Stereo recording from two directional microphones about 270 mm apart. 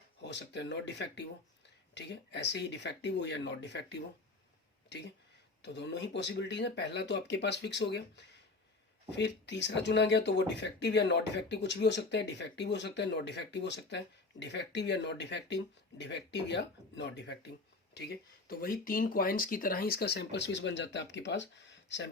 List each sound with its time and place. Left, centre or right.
0.2 s speech: left